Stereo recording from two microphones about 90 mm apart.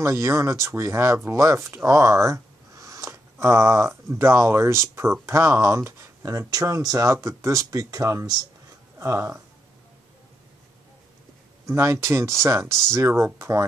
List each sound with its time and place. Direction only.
0.0 s speech: 35° right (ahead or behind)
11.6 s speech: 30° right (ahead or behind)